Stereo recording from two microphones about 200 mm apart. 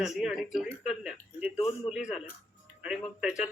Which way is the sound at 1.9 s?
5° right (ahead or behind).